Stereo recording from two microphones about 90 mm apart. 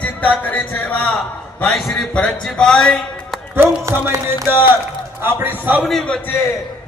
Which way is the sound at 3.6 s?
30° right (ahead or behind).